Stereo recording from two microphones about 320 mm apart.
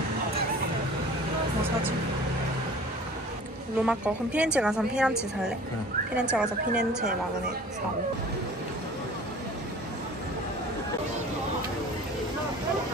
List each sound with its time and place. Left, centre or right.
3.8 s a woman's voice: centre
6.1 s a woman's voice: centre